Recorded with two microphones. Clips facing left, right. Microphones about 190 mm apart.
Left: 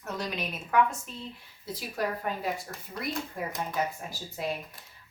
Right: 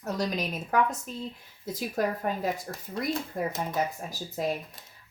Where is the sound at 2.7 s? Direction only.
25° right (ahead or behind).